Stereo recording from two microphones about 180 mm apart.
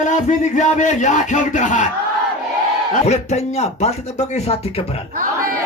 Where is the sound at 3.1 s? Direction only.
35° left (ahead or behind).